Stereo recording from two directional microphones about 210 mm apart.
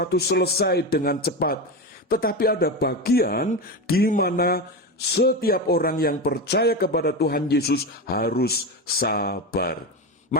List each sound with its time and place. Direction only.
0.0 s speech: 50° left (ahead or behind)